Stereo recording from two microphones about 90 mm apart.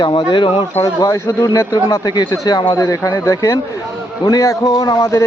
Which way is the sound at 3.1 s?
35° left (ahead or behind).